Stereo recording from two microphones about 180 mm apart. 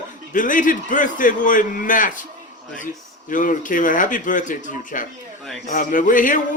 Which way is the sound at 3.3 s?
50° left (ahead or behind).